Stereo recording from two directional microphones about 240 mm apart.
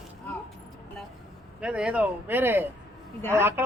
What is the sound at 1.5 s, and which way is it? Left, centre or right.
A man's voice, centre.